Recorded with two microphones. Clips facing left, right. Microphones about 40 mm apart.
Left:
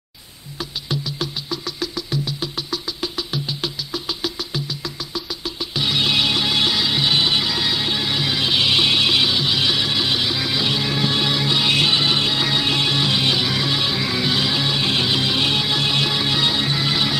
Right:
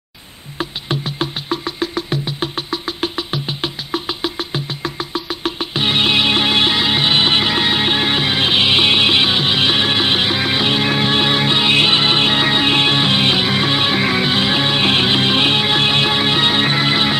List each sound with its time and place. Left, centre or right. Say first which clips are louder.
0.6 s music: right 4 dB; right